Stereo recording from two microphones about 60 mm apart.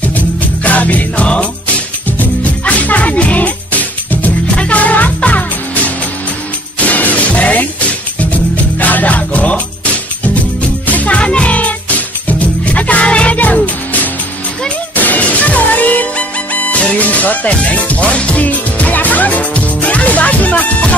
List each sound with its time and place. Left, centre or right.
0.7 s jingle bell: left
2.0 s music: left
6.8 s music: left
10.9 s music: left